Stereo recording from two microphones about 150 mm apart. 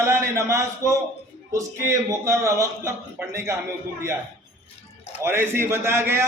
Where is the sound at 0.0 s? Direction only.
20° right (ahead or behind).